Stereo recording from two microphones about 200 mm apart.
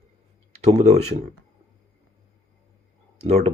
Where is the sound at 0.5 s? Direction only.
30° right (ahead or behind).